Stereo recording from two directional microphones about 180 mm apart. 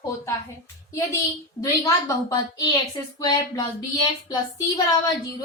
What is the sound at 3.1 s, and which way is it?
Speech, 20° left (ahead or behind).